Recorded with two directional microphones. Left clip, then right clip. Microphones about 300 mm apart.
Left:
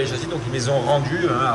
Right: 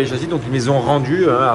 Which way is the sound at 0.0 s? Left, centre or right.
Centre.